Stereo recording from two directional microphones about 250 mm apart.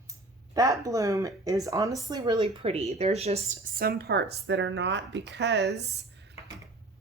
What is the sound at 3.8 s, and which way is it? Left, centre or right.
A woman's voice, right.